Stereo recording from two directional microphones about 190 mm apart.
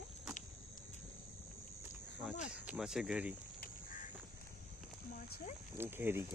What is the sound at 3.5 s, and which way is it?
Duck, 45° left (ahead or behind).